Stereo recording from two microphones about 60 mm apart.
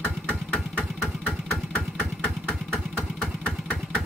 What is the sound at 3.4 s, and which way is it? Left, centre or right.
Engine, centre.